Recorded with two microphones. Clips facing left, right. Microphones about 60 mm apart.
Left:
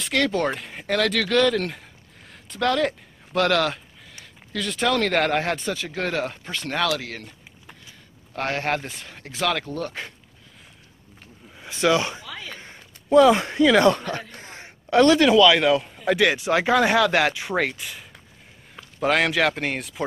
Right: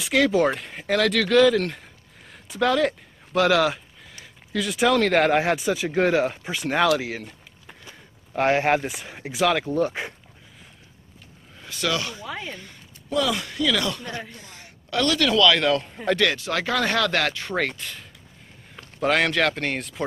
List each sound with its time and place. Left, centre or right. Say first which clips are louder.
0.0 s speech: right 3 dB; centre
11.6 s speech: left 6 dB; left
12.3 s a sound: right 4 dB; right
12.5 s a man's voice: even; left; by 20.1 s centre